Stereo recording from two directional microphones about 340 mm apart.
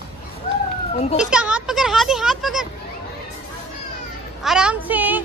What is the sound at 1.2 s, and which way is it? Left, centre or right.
A child's voice, centre.